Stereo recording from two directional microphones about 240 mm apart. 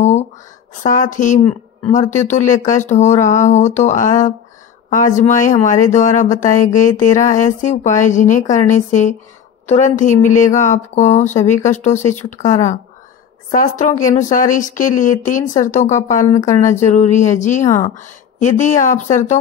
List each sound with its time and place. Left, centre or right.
0.8 s speech: left
17.6 s speech: centre
17.9 s speech: left